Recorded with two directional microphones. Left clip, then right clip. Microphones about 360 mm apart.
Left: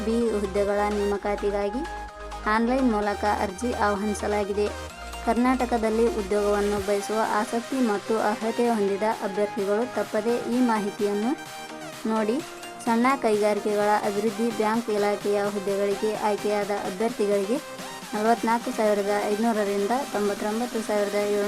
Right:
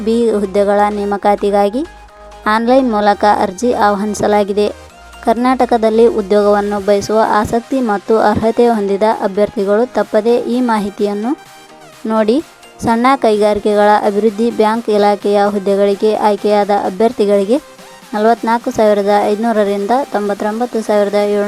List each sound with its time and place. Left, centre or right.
0.1 s speech: centre